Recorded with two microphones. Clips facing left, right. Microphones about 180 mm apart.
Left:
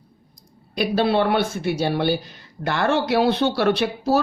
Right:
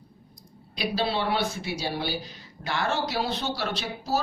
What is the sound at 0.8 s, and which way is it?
Speech, 55° left (ahead or behind).